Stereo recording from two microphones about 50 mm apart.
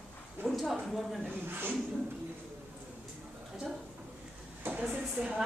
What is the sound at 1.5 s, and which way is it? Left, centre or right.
Speech, right.